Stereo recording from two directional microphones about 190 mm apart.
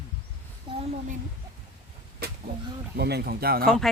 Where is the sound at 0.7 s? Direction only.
25° right (ahead or behind).